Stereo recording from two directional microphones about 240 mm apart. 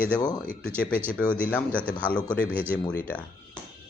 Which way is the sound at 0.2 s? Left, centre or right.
Centre.